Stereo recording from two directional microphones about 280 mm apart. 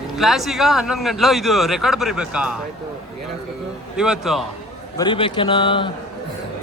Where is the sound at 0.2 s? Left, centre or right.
Centre.